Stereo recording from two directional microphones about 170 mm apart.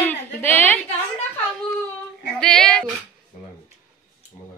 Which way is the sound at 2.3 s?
5° left (ahead or behind).